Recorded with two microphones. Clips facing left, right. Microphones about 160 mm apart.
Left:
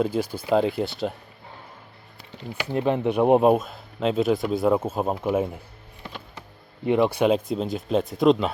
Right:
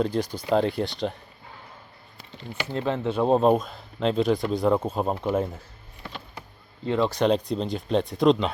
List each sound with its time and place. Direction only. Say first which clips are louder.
0.0 s speech: left 1 dB; 5° left (ahead or behind)
2.5 s speech: left 4 dB; 15° left (ahead or behind)
6.8 s speech: left 2 dB; 15° left (ahead or behind)